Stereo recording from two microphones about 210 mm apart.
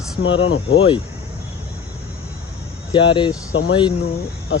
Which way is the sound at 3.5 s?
65° left (ahead or behind).